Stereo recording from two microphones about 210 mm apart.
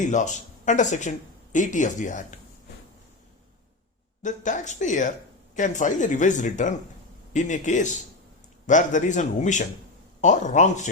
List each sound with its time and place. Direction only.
0.0 s speech: 35° left (ahead or behind)
4.2 s speech: 35° left (ahead or behind)